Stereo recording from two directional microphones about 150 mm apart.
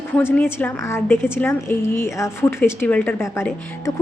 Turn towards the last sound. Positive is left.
turn(degrees=15)  # may be behind; listen again after turning